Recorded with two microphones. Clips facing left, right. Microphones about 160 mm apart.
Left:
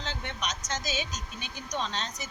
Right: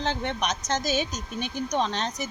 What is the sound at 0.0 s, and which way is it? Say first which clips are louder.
Speech: right 8 dB; 60° right (ahead or behind).